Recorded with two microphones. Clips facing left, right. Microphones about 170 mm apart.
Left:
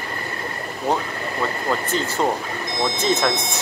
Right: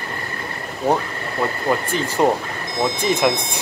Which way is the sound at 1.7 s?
10° right (ahead or behind).